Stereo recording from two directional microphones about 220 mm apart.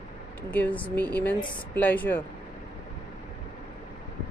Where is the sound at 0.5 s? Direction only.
5° left (ahead or behind).